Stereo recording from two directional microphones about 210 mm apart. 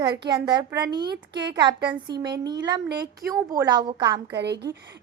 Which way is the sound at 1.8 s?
20° right (ahead or behind).